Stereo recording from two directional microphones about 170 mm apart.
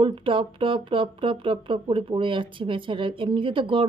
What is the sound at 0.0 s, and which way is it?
A woman's voice, 30° right (ahead or behind).